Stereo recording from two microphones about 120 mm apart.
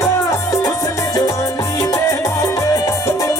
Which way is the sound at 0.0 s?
30° left (ahead or behind).